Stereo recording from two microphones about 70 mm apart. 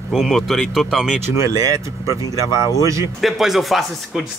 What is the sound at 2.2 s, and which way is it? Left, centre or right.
Speech, left.